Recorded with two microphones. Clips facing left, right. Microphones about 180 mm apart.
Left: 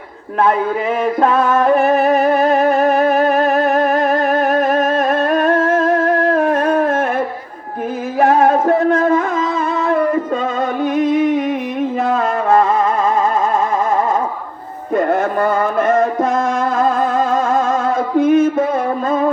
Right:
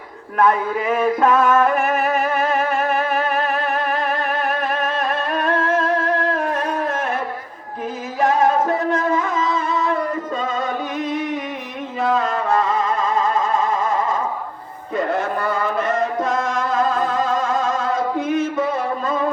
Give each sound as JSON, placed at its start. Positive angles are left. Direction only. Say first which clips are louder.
{"t": 0.4, "sound": "music", "louder": "left 3 dB", "side_deg": 30}
{"t": 8.2, "sound": "music", "louder": "left 4 dB", "side_deg": 55}
{"t": 10.9, "sound": "music", "louder": "left 9 dB", "side_deg": 55}